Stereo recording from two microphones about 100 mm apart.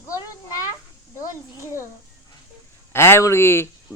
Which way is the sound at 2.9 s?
25° left (ahead or behind).